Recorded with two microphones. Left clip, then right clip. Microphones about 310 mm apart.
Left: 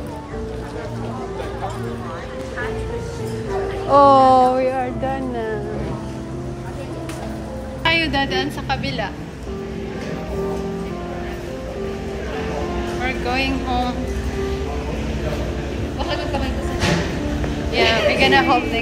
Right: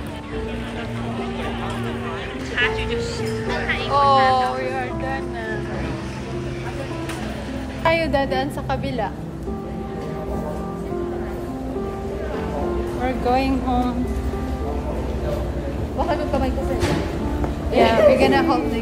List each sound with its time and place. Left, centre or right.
3.9 s a sound: left
7.8 s a woman's voice: centre
13.0 s speech: centre
17.7 s speech: centre